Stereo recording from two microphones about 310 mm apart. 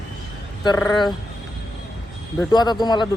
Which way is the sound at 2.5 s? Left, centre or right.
Centre.